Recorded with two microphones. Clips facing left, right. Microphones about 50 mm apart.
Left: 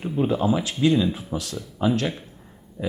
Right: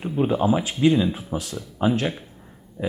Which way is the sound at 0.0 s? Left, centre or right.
Centre.